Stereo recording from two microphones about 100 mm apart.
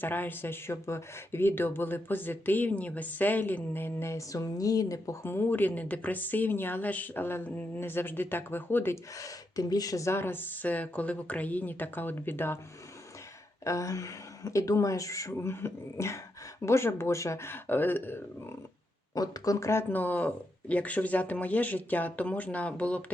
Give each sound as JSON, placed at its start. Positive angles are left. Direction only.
{"t": 0.0, "sound": "speech", "side_deg": 20}
{"t": 9.1, "sound": "speech", "side_deg": 35}
{"t": 13.7, "sound": "speech", "side_deg": 30}
{"t": 19.1, "sound": "speech", "side_deg": 40}
{"t": 19.9, "sound": "speech", "side_deg": 20}